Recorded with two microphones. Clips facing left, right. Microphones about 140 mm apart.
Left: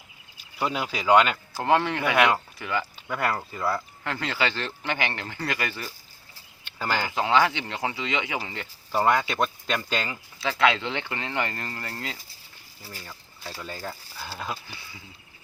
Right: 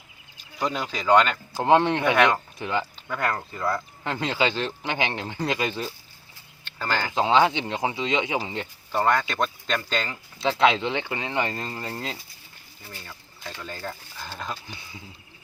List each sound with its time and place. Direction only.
0.6 s speech: 10° left (ahead or behind)
1.5 s a man's voice: 20° right (ahead or behind)
2.1 s speech: 10° left (ahead or behind)
2.6 s a man's voice: 20° right (ahead or behind)
3.1 s speech: 5° left (ahead or behind)
4.0 s a man's voice: 20° right (ahead or behind)
6.7 s speech: 10° left (ahead or behind)
7.1 s a man's voice: 20° right (ahead or behind)
8.9 s speech: 10° left (ahead or behind)
10.4 s a man's voice: 20° right (ahead or behind)
13.6 s speech: 10° left (ahead or behind)